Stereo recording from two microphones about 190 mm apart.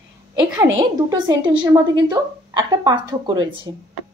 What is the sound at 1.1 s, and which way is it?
A woman's voice, 20° right (ahead or behind).